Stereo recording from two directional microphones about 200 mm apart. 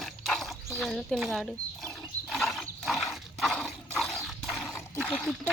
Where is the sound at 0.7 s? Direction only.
Centre (ahead or behind).